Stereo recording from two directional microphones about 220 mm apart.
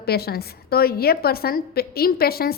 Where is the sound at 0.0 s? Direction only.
45° left (ahead or behind).